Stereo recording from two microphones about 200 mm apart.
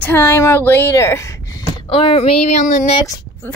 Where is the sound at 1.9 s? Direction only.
30° left (ahead or behind).